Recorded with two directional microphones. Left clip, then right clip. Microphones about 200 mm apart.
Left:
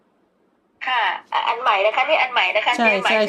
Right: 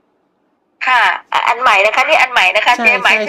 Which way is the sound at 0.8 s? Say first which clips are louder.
Right 9 dB; 45° right (ahead or behind).